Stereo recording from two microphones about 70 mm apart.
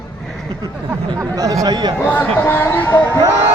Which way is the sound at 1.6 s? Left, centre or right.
Right.